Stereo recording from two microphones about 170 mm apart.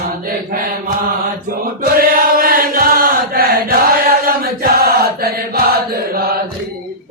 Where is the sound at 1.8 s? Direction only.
60° right (ahead or behind).